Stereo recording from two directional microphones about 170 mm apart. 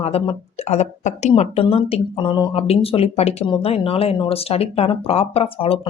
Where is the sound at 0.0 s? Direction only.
35° left (ahead or behind).